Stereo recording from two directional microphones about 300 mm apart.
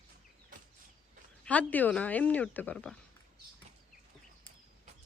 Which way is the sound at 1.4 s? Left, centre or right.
Centre.